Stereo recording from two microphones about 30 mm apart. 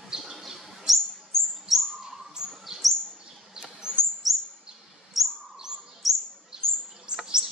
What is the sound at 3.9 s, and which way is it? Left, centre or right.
Chirp, right.